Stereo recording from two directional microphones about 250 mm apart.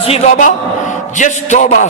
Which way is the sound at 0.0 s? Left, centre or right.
Left.